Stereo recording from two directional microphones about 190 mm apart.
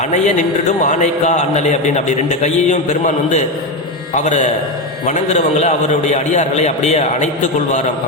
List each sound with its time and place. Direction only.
0.9 s a man's voice: 40° left (ahead or behind)
4.2 s a man's voice: 40° left (ahead or behind)